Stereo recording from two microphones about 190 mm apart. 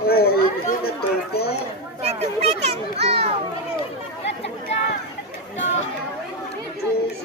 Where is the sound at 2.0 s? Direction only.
35° right (ahead or behind).